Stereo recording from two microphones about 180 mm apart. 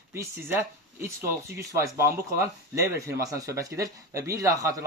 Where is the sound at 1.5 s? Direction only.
15° right (ahead or behind).